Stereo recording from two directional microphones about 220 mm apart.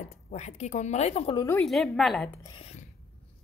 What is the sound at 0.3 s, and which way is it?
A woman's voice, 30° left (ahead or behind).